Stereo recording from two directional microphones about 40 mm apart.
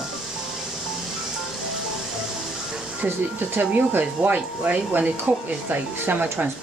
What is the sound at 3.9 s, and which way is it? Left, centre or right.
Speech, right.